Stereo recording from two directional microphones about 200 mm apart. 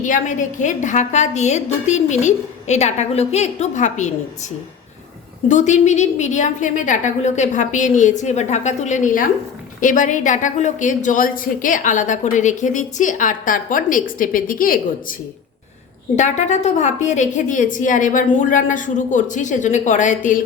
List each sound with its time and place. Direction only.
0.0 s a woman's voice: 40° left (ahead or behind)
5.5 s a woman's voice: 35° left (ahead or behind)
16.1 s a woman's voice: 35° left (ahead or behind)